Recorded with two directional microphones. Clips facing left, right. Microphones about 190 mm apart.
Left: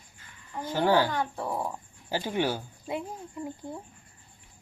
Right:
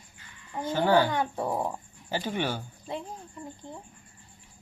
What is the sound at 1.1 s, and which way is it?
Speech, 20° right (ahead or behind).